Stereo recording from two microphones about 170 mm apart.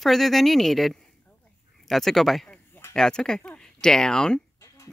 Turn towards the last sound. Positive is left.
turn(degrees=5)  # may be behind; listen again after turning